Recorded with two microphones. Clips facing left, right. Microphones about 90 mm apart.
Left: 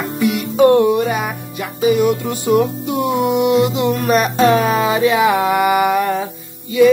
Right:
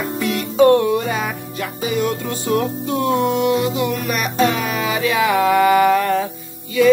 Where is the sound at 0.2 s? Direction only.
15° left (ahead or behind).